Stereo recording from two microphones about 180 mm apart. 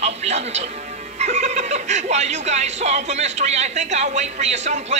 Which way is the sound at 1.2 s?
40° right (ahead or behind).